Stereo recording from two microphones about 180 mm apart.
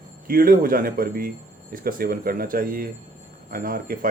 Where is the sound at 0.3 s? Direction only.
55° right (ahead or behind).